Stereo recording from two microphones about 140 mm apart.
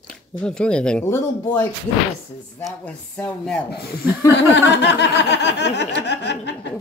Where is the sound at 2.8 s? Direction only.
10° left (ahead or behind).